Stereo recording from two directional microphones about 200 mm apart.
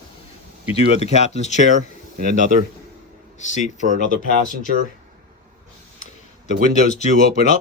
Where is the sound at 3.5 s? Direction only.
35° left (ahead or behind).